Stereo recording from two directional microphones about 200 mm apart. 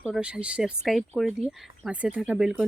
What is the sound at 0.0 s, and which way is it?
Speech, 5° right (ahead or behind).